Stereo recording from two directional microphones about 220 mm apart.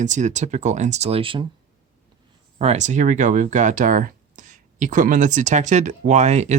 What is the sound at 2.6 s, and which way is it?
Speech, 30° right (ahead or behind).